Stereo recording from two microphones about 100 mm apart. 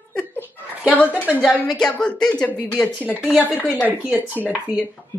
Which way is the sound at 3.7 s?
10° right (ahead or behind).